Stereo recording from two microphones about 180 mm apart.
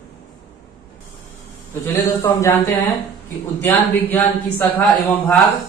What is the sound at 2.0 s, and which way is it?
Speech, 20° left (ahead or behind).